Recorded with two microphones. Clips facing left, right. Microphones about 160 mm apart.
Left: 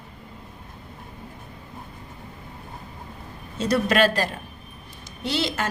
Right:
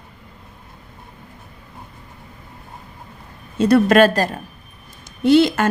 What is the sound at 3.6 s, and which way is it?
A woman's voice, 50° right (ahead or behind).